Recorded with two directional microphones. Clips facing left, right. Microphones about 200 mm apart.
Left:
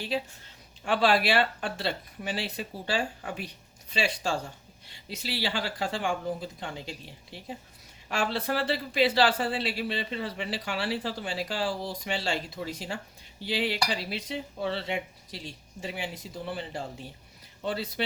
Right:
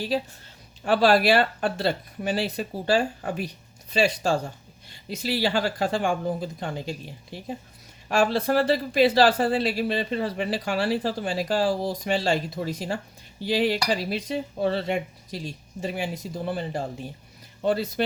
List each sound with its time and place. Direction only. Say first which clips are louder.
0.1 s speech: right 5 dB; 40° right (ahead or behind)